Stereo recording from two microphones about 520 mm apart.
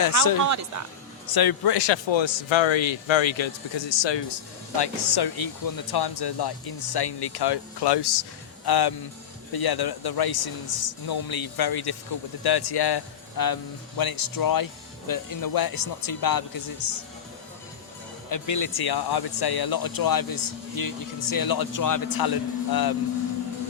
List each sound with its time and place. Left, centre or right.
0.4 s speech: right
1.3 s speech: left
18.3 s speech: left